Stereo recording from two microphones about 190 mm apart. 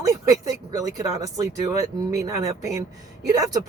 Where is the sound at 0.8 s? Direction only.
15° right (ahead or behind).